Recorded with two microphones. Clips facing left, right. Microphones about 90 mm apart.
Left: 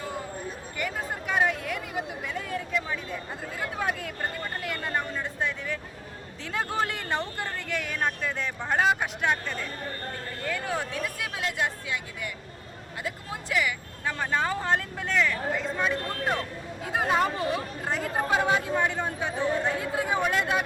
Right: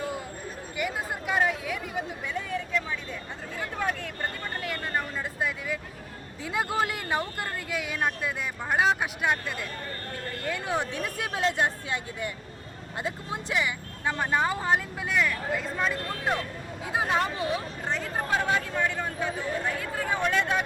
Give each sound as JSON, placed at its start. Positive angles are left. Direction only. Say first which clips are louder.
{"t": 0.8, "sound": "a sound", "louder": "right 1 dB", "side_deg": -10}
{"t": 1.4, "sound": "speech", "louder": "left 1 dB", "side_deg": 0}
{"t": 10.4, "sound": "speech", "louder": "right 1 dB", "side_deg": -20}
{"t": 20.0, "sound": "speech", "louder": "right 1 dB", "side_deg": 10}